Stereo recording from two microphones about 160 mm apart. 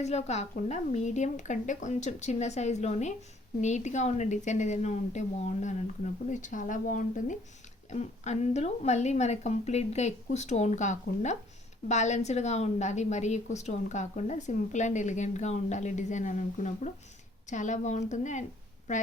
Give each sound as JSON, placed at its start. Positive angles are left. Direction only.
{"t": 0.0, "sound": "a woman's voice", "side_deg": 45}